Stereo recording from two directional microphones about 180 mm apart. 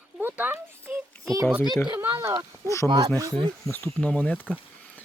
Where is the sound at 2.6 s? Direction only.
15° left (ahead or behind).